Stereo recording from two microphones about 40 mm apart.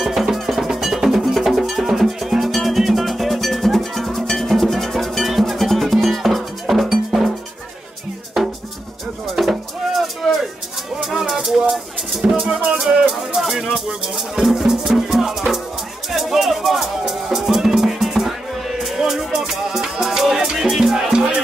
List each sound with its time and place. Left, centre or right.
0.0 s cowbell: centre
2.4 s music: centre
8.4 s music: centre
9.4 s a sound: centre
11.0 s music: centre
13.4 s music: centre